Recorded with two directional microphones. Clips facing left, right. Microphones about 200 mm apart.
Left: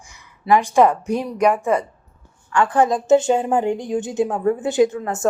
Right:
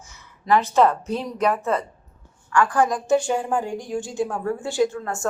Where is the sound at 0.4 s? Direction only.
15° left (ahead or behind).